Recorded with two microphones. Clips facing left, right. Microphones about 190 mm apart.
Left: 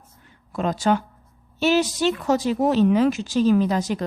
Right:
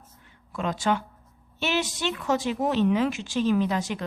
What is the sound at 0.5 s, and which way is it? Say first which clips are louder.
Speech: left 5 dB; 40° left (ahead or behind).